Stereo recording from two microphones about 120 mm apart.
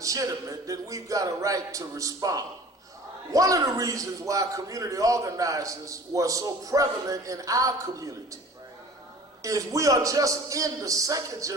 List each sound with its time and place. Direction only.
0.0 s a man's voice: 30° right (ahead or behind)
9.4 s a man's voice: 30° right (ahead or behind)